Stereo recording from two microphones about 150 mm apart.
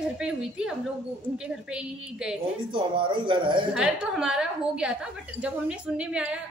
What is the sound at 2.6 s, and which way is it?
Speech, 35° right (ahead or behind).